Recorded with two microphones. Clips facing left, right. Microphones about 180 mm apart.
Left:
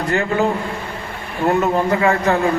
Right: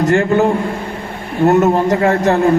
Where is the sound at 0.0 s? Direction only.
45° right (ahead or behind).